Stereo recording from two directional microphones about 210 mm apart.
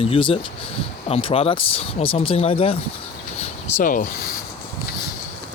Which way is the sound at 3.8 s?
40° left (ahead or behind).